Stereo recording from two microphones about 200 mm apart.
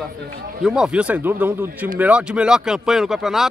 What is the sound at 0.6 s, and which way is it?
Speech, 5° right (ahead or behind).